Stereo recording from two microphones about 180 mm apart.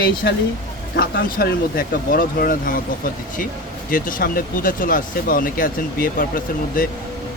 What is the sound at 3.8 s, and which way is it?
Speech, 50° left (ahead or behind).